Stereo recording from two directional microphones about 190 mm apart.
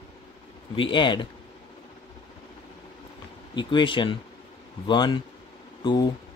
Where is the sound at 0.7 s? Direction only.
25° left (ahead or behind).